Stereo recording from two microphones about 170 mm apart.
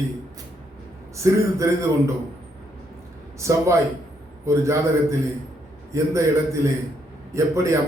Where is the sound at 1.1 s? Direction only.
15° right (ahead or behind).